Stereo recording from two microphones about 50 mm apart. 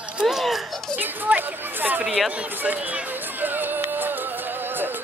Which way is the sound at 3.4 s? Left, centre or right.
Right.